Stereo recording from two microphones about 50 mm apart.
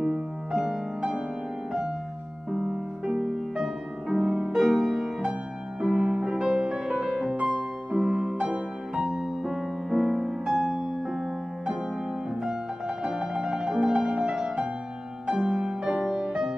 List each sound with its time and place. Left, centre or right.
0.0 s music: centre
2.5 s music: centre
10.6 s music: centre
12.4 s music: centre